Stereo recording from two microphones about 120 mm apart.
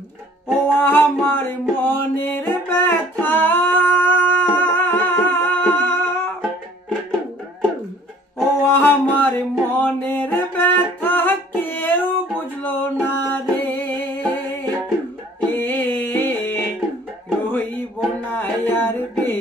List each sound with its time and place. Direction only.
0.7 s music: 15° left (ahead or behind)
8.6 s music: 20° left (ahead or behind)
17.5 s a sound: 15° left (ahead or behind)